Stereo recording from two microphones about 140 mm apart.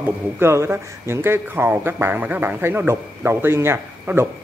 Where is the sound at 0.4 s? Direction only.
20° right (ahead or behind).